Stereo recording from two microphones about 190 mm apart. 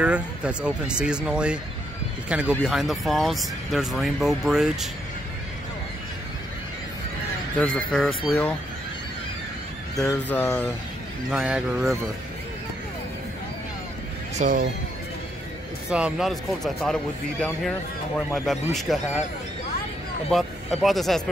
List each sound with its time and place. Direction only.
0.0 s speech: 5° right (ahead or behind)
7.6 s speech: 5° left (ahead or behind)
10.0 s a sound: 10° left (ahead or behind)
11.2 s speech: 5° right (ahead or behind)
14.3 s speech: 45° right (ahead or behind)
15.9 s speech: 5° right (ahead or behind)
20.2 s speech: centre (ahead or behind)